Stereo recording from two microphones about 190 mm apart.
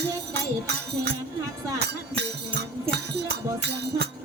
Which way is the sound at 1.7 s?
60° right (ahead or behind).